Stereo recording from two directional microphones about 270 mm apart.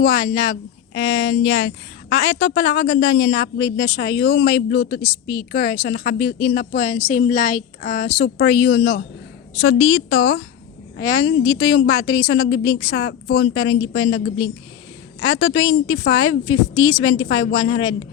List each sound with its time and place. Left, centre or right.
0.0 s a woman's voice: left
9.8 s a woman's voice: left